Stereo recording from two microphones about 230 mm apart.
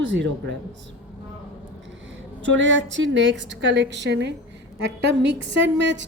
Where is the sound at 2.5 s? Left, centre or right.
Right.